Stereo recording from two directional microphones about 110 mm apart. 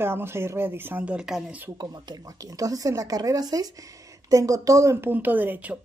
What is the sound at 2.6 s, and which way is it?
Speech, 35° right (ahead or behind).